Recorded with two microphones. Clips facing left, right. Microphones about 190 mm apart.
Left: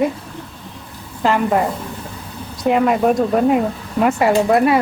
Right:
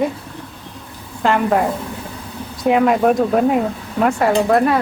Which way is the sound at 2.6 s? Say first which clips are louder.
Right 1 dB; centre (ahead or behind).